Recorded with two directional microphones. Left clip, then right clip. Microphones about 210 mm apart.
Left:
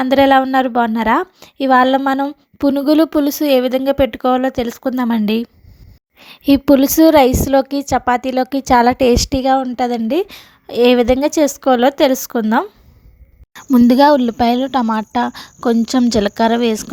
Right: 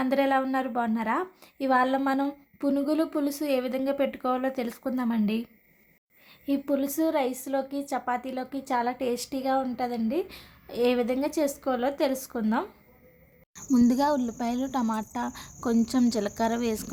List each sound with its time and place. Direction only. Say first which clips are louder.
0.0 s a woman's voice: left 14 dB; 40° left (ahead or behind)